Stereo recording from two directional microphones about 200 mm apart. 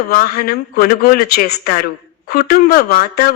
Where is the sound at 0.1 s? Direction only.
50° left (ahead or behind).